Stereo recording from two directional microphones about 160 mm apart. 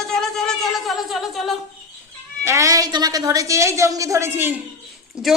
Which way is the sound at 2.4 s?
20° right (ahead or behind).